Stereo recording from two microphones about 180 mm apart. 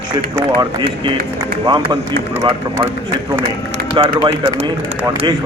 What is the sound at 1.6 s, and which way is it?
Speech, 25° right (ahead or behind).